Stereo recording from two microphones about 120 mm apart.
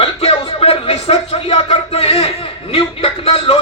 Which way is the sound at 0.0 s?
55° left (ahead or behind).